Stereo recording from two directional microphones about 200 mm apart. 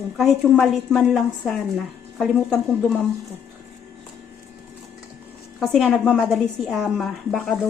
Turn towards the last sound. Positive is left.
turn(degrees=0)  # may be behind; listen again after turning